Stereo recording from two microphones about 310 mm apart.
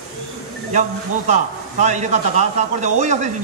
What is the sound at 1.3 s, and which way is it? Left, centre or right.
A man's voice, right.